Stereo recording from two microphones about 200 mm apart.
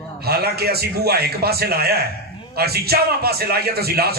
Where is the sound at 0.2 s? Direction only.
50° right (ahead or behind).